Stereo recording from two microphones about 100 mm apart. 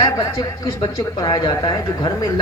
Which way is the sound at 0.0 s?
50° left (ahead or behind).